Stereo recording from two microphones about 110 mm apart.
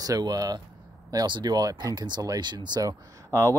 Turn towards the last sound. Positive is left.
turn(degrees=-25)  # may be behind; listen again after turning